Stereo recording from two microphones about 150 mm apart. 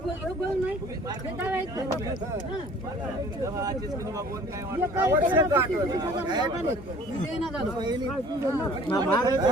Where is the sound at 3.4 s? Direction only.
20° right (ahead or behind).